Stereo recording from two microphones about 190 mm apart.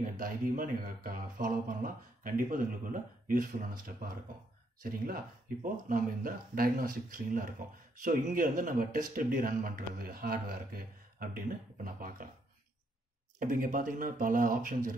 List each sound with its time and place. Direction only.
0.0 s speech: 45° right (ahead or behind)
13.4 s speech: 45° right (ahead or behind)